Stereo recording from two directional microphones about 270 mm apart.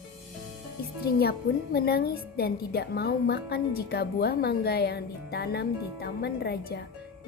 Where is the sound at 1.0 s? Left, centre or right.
Left.